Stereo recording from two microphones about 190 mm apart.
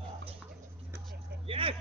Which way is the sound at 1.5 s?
30° right (ahead or behind).